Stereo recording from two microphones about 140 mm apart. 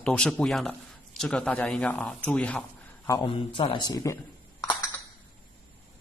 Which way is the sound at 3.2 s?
35° left (ahead or behind).